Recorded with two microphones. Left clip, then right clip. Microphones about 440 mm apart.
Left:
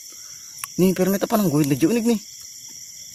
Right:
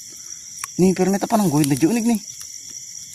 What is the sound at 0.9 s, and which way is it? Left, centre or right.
Speech, left.